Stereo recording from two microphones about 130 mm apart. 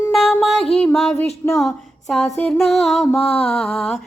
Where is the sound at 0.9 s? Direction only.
5° left (ahead or behind).